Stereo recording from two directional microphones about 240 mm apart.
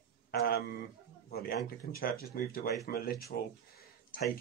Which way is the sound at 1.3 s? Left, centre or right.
Left.